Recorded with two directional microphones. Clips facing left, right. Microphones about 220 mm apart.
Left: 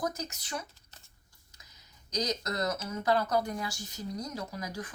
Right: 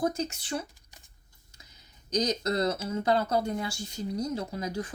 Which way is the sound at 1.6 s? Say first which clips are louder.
Right 3 dB; 30° right (ahead or behind).